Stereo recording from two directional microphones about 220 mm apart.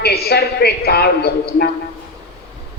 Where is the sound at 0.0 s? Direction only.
45° left (ahead or behind).